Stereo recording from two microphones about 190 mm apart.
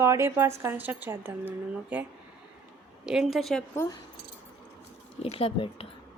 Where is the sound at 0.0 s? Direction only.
15° right (ahead or behind).